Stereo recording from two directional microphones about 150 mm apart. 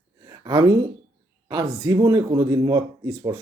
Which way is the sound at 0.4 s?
25° right (ahead or behind).